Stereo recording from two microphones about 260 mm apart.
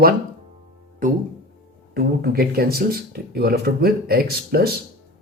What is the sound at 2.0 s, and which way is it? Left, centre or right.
Speech, right.